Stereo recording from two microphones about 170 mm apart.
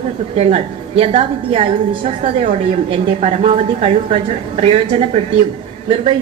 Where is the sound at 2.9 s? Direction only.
35° right (ahead or behind).